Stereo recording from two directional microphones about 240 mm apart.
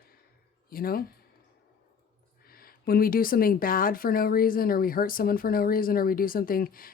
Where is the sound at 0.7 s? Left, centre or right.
Left.